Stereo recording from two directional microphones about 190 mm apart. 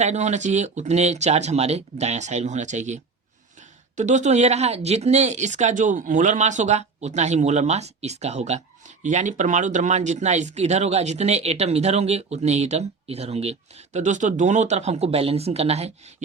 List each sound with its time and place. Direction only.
0.0 s speech: 35° right (ahead or behind)